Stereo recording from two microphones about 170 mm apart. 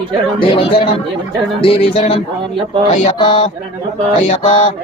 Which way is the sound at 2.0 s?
40° left (ahead or behind).